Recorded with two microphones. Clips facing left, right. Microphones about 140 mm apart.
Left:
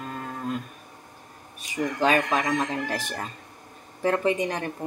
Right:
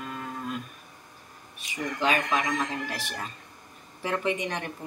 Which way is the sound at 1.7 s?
40° left (ahead or behind).